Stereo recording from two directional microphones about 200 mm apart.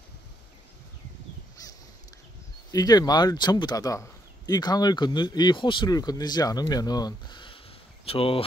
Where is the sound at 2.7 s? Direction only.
20° left (ahead or behind).